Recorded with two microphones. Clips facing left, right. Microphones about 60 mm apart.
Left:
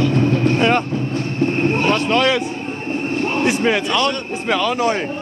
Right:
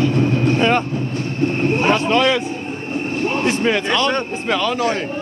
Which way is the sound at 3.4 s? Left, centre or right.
Centre.